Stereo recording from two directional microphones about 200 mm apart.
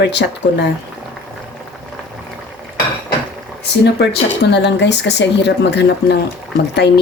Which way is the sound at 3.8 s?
60° left (ahead or behind).